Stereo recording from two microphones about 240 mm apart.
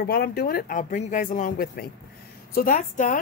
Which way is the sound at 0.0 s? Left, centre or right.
Left.